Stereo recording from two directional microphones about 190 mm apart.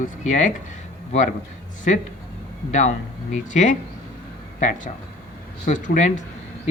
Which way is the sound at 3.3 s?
40° left (ahead or behind).